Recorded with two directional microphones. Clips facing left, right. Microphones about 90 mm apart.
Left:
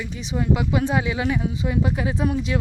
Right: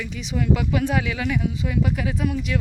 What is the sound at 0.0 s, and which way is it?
Speech, 30° left (ahead or behind).